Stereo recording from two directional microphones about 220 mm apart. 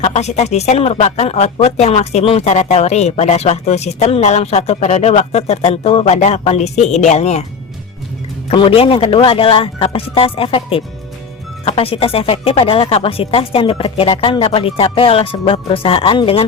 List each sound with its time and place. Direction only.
0.0 s speech: 30° left (ahead or behind)
8.4 s speech: 25° left (ahead or behind)